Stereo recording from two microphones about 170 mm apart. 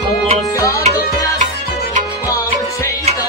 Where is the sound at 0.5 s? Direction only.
20° left (ahead or behind).